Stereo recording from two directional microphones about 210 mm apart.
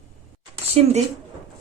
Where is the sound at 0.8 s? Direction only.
30° right (ahead or behind).